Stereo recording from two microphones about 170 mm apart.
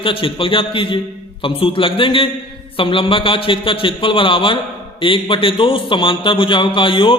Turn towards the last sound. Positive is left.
turn(degrees=30)  # may be behind; listen again after turning